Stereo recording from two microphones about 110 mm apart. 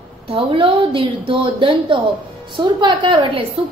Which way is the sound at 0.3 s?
55° right (ahead or behind).